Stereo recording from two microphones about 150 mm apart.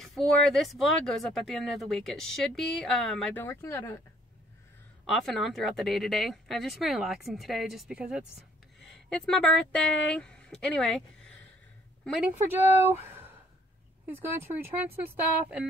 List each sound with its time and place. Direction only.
0.0 s speech: 5° left (ahead or behind)
3.3 s speech: 15° left (ahead or behind)
5.0 s speech: centre (ahead or behind)
12.2 s speech: 10° right (ahead or behind)